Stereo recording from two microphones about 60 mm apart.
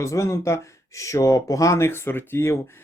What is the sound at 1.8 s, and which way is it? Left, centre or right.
Speech, left.